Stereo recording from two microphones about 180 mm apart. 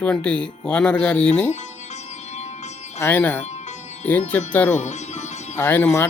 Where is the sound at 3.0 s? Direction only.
10° left (ahead or behind).